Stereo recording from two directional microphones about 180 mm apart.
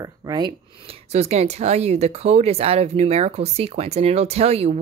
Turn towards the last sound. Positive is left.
turn(degrees=-35)  # may be behind; listen again after turning